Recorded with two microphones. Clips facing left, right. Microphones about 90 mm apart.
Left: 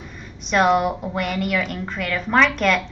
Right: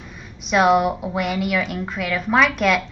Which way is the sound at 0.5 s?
5° right (ahead or behind).